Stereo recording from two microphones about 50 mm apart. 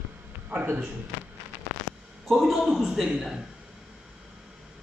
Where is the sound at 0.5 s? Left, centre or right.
Right.